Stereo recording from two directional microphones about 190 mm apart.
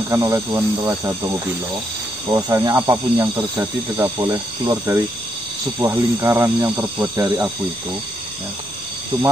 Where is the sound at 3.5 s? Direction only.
15° right (ahead or behind).